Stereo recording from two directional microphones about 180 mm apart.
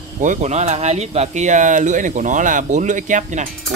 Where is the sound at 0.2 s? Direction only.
45° right (ahead or behind).